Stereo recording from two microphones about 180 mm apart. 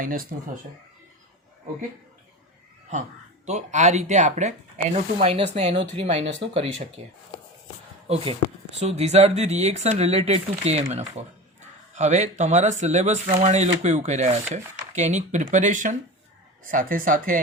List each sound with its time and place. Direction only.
0.0 s speech: 50° right (ahead or behind)
3.4 s speech: 40° right (ahead or behind)
8.0 s speech: 30° right (ahead or behind); by 17.4 s 50° right (ahead or behind)